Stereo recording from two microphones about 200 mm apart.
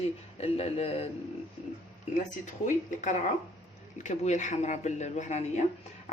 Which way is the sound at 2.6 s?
40° left (ahead or behind).